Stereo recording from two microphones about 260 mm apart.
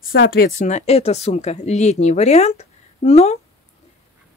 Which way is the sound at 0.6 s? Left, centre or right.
Left.